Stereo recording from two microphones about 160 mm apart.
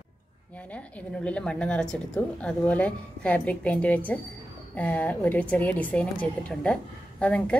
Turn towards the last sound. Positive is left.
turn(degrees=5)  # may be behind; listen again after turning